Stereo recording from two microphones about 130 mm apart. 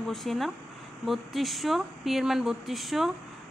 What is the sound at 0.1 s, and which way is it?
A woman's voice, centre (ahead or behind).